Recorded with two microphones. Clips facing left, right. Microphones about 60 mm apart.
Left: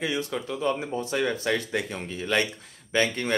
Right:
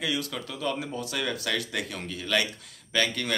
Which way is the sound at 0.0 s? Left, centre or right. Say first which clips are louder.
Left 2 dB; left.